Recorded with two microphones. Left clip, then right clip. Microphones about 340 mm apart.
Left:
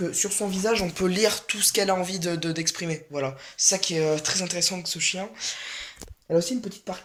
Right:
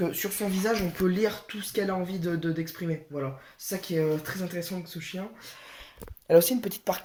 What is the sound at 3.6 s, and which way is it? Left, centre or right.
Speech, centre.